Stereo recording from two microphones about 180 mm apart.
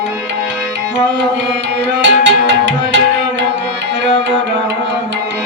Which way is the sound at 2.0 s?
90° right.